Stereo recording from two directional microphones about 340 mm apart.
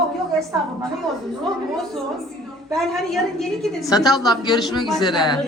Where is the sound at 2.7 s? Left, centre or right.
Centre.